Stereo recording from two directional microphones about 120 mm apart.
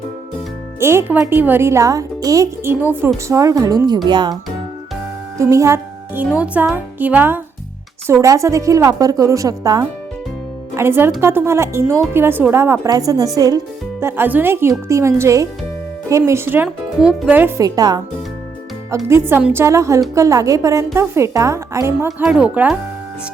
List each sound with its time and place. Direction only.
0.8 s a woman's voice: 20° right (ahead or behind); by 4.4 s 40° right (ahead or behind)
5.4 s speech: 25° right (ahead or behind)
6.2 s a woman's voice: 10° right (ahead or behind); by 9.8 s 30° right (ahead or behind)
10.8 s a woman's voice: 20° right (ahead or behind)
14.0 s a woman's voice: 15° right (ahead or behind)
17.0 s speech: 5° right (ahead or behind)
17.6 s a woman's voice: 30° right (ahead or behind)
22.2 s speech: 10° right (ahead or behind)